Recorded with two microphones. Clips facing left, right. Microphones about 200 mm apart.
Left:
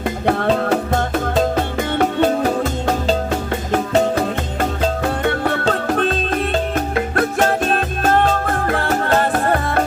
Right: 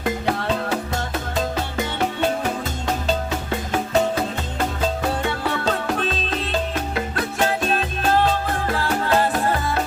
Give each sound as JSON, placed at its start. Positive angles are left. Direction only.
{"t": 0.3, "sound": "music", "side_deg": 55}
{"t": 5.0, "sound": "music", "side_deg": 55}